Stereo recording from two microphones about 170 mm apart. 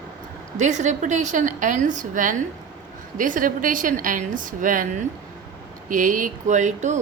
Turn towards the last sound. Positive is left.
turn(degrees=-45)  # may be behind; listen again after turning